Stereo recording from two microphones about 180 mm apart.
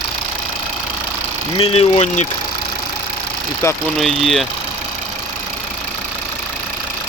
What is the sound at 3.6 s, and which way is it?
Speech, 15° left (ahead or behind).